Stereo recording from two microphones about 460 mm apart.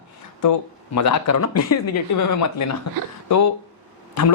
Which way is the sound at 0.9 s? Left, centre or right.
Left.